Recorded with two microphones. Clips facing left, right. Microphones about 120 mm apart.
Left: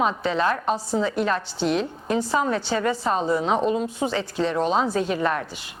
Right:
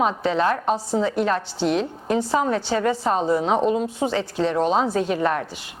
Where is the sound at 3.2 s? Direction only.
45° right (ahead or behind).